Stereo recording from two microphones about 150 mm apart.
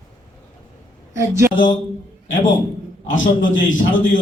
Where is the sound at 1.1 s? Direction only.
20° right (ahead or behind).